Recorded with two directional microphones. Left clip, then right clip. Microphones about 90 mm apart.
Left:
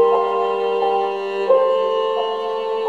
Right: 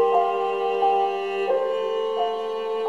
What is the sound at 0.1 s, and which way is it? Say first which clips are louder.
Music: left 4 dB; 50° left (ahead or behind).